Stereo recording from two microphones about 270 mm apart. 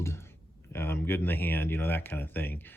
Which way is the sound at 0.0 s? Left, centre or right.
Centre.